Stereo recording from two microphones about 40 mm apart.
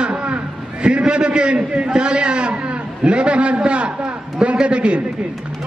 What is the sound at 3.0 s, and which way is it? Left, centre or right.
Speech, right.